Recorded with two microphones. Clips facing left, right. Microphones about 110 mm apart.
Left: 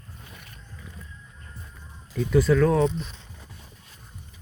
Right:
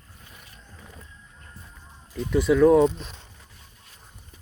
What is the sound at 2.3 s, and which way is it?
Speech, 10° right (ahead or behind).